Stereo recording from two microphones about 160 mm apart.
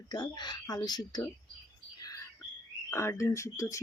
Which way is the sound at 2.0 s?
20° left (ahead or behind).